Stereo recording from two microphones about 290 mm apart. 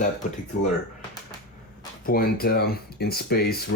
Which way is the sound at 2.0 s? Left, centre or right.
Left.